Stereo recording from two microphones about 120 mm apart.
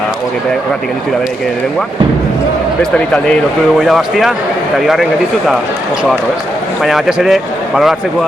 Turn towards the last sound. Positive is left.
turn(degrees=0)  # may be behind; listen again after turning